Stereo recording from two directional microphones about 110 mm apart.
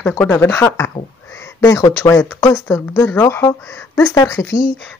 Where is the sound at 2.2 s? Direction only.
25° left (ahead or behind).